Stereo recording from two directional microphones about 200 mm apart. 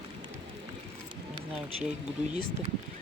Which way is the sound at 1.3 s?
30° right (ahead or behind).